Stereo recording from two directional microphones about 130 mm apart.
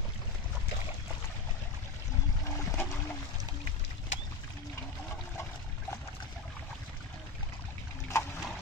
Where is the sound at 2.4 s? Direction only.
25° left (ahead or behind).